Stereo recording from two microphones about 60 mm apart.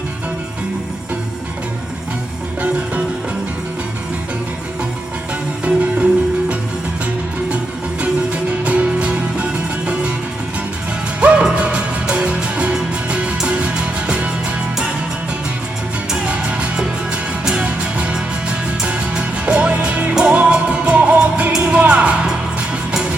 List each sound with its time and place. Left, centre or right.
5.6 s music: right
8.0 s music: right
11.2 s music: right
16.0 s music: centre